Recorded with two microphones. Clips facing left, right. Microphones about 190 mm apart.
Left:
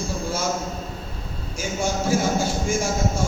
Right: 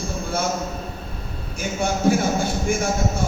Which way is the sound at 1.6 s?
60° right (ahead or behind).